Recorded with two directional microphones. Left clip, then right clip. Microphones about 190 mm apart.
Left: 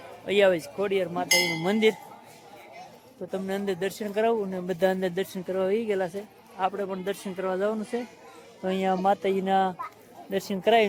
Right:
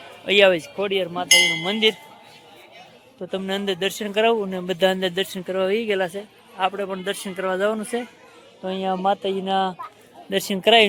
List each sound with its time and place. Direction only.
0.3 s speech: 20° right (ahead or behind)
1.6 s speech: 20° left (ahead or behind)
3.3 s speech: 15° right (ahead or behind)
8.6 s speech: 5° left (ahead or behind)
10.2 s speech: 15° right (ahead or behind)